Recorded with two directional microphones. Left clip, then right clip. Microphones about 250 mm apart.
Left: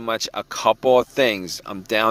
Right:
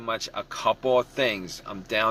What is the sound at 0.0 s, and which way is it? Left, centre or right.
Speech, left.